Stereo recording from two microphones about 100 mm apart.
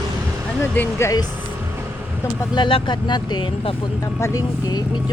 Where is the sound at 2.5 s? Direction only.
55° left (ahead or behind).